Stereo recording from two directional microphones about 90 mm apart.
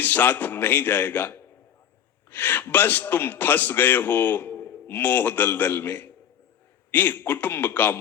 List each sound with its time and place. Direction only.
0.0 s a man's voice: 20° left (ahead or behind)